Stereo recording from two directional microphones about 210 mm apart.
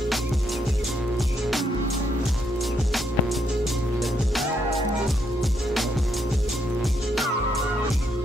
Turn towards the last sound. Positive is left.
turn(degrees=0)  # may be behind; listen again after turning